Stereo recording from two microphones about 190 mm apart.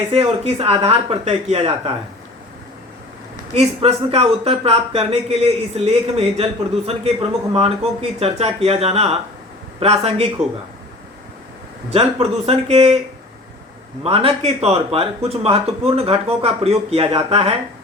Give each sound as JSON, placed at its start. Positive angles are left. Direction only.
{"t": 0.1, "sound": "speech", "side_deg": -30}
{"t": 3.5, "sound": "speech", "side_deg": -30}
{"t": 11.9, "sound": "speech", "side_deg": -30}
{"t": 14.0, "sound": "speech", "side_deg": -30}